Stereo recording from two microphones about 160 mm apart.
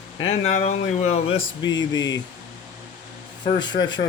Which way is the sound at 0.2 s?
40° left (ahead or behind).